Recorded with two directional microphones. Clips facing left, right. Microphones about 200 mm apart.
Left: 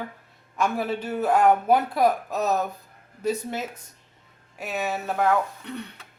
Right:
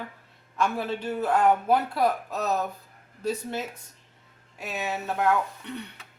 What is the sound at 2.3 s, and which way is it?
Speech, 45° left (ahead or behind).